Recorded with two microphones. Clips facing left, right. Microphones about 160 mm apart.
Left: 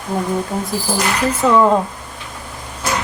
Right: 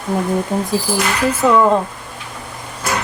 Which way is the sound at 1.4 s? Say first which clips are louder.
Right 1 dB; 5° right (ahead or behind).